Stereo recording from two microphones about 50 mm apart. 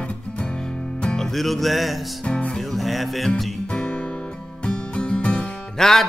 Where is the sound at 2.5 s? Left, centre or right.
Centre.